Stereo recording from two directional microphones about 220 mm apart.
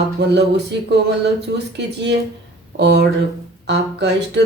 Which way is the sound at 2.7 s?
50° right (ahead or behind).